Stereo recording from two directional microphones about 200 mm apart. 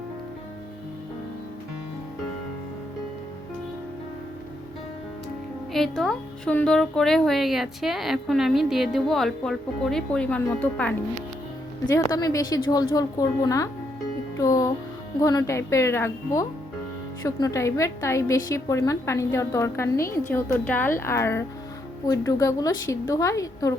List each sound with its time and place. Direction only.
5.7 s speech: centre (ahead or behind)
11.9 s a woman's voice: 20° left (ahead or behind)